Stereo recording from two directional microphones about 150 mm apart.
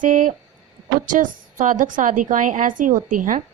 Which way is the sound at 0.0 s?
60° right (ahead or behind).